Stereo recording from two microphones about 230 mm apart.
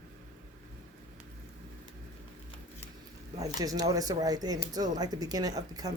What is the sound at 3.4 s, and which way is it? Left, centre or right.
Speech, centre.